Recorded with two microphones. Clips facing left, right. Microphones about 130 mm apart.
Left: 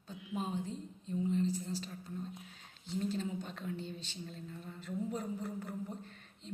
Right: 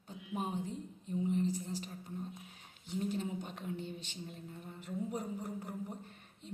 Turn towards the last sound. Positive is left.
turn(degrees=-15)  # may be behind; listen again after turning